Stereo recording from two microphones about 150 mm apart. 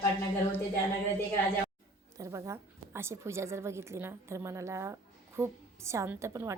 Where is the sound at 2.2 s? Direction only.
20° right (ahead or behind).